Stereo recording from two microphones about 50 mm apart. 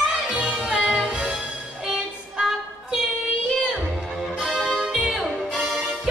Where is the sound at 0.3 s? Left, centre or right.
Centre.